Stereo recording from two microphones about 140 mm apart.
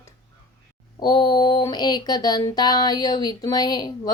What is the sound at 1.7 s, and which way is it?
Speech, 30° left (ahead or behind).